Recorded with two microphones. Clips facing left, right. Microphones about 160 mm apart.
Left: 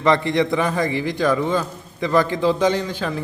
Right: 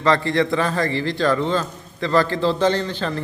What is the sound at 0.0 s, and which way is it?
A man's voice, 20° left (ahead or behind).